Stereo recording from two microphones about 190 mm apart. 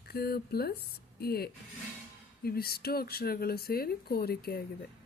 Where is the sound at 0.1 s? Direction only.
55° left (ahead or behind).